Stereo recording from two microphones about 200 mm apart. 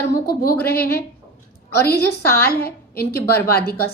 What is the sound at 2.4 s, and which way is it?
Speech, 50° left (ahead or behind).